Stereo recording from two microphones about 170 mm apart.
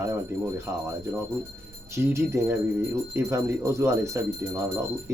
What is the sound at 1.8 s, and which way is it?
Speech, 15° right (ahead or behind).